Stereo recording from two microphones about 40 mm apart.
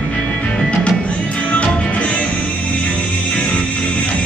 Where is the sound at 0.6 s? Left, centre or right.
Left.